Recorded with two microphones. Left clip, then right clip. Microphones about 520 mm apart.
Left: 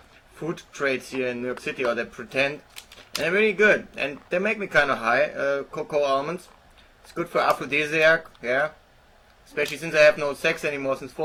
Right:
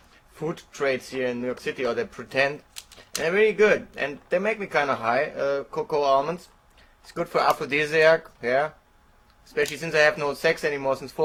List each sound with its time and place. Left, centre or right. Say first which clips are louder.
0.8 s speech: even; right